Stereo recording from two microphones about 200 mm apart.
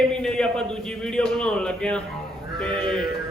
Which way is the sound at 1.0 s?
5° left (ahead or behind).